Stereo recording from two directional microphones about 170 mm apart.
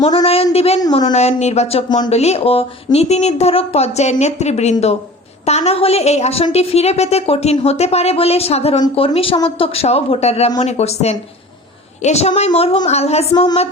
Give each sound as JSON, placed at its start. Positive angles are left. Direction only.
{"t": 0.0, "sound": "a woman's voice", "side_deg": 35}
{"t": 0.8, "sound": "a woman's voice", "side_deg": 25}
{"t": 1.1, "sound": "a woman's voice", "side_deg": 40}
{"t": 13.3, "sound": "a woman's voice", "side_deg": 25}